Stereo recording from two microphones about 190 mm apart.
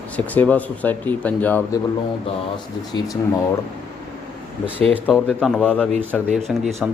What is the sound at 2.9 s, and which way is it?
Speech, 20° left (ahead or behind).